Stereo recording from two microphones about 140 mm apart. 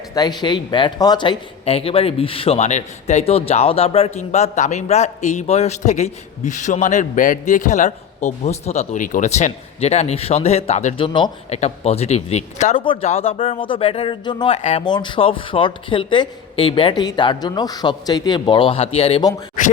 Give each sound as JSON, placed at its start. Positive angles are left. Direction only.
{"t": 0.1, "sound": "speech", "side_deg": 30}
{"t": 11.0, "sound": "a man's voice", "side_deg": 35}
{"t": 11.4, "sound": "speech", "side_deg": 50}
{"t": 12.8, "sound": "a man's voice", "side_deg": 35}
{"t": 13.1, "sound": "a man's voice", "side_deg": 50}
{"t": 14.5, "sound": "speech", "side_deg": 50}
{"t": 14.8, "sound": "a man's voice", "side_deg": 35}